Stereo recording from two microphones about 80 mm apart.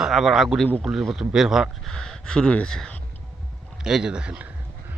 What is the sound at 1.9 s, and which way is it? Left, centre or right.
Speech, centre.